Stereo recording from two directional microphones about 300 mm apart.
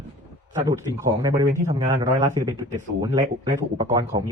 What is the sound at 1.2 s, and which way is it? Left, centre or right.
Speech, centre.